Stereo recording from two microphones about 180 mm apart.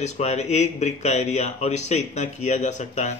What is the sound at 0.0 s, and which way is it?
Speech, 40° left (ahead or behind).